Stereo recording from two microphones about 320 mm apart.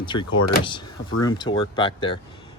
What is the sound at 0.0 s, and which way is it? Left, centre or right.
Speech, centre.